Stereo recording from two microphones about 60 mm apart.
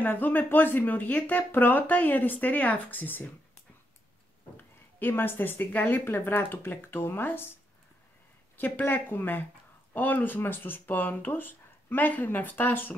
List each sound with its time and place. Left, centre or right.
0.0 s speech: left
4.6 s speech: left
8.5 s speech: left